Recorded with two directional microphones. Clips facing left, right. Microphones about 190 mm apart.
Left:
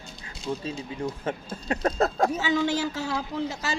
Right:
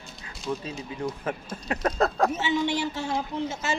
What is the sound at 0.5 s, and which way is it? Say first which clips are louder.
Speech: left 1 dB; 30° left (ahead or behind).